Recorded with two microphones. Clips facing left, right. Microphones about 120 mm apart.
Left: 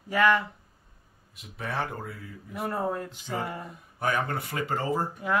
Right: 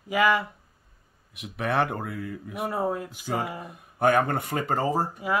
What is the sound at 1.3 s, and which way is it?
Speech, 70° right (ahead or behind).